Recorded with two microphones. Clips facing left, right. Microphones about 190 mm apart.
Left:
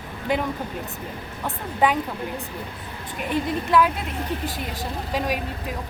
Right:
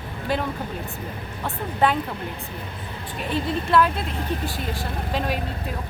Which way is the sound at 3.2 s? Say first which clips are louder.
Left 1 dB; 15° left (ahead or behind).